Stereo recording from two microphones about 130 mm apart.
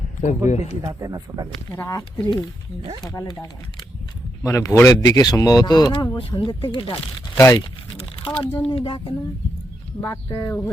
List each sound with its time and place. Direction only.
0.2 s a man's voice: 70° left (ahead or behind)
0.8 s speech: 25° right (ahead or behind)
1.9 s speech: 30° left (ahead or behind)
4.4 s speech: 25° left (ahead or behind)
7.3 s speech: 20° left (ahead or behind)
7.9 s speech: 40° left (ahead or behind)
10.1 s speech: 30° left (ahead or behind)